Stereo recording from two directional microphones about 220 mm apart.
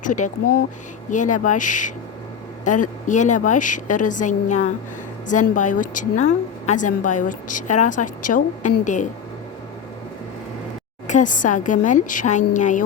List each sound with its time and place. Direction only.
0.0 s a woman's voice: 35° left (ahead or behind)
11.0 s a woman's voice: 35° left (ahead or behind)